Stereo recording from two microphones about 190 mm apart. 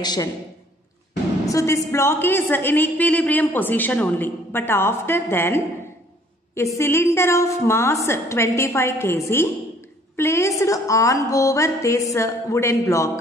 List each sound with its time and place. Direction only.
0.0 s a man's voice: 20° left (ahead or behind)
1.5 s a woman's voice: 15° left (ahead or behind)